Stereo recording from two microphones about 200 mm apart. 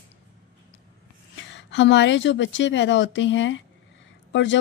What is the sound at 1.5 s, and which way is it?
A woman's voice, 60° left (ahead or behind).